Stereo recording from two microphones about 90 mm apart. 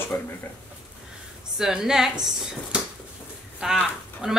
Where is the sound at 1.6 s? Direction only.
5° right (ahead or behind).